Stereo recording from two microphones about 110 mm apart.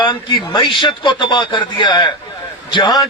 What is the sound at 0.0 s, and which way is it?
A man's voice, 45° left (ahead or behind).